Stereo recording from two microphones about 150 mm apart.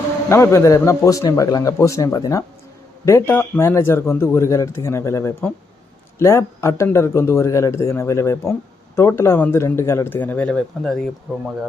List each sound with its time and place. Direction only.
0.3 s a man's voice: 15° left (ahead or behind)